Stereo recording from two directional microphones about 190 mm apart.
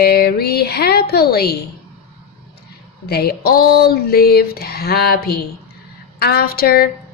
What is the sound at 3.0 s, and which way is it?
A woman's voice, 55° left (ahead or behind).